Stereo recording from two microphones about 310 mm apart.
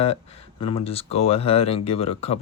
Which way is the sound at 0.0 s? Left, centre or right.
Centre.